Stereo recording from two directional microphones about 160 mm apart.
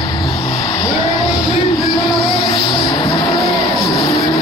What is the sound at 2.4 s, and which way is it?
Vehicle, 30° left (ahead or behind).